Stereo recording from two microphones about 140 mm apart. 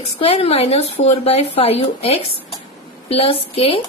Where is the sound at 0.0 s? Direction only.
45° left (ahead or behind).